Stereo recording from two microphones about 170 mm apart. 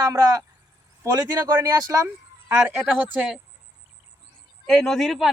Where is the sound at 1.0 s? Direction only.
20° right (ahead or behind).